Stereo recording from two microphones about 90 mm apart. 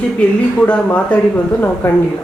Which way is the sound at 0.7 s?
15° left (ahead or behind).